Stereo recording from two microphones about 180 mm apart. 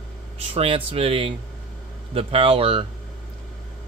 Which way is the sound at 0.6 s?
30° right (ahead or behind).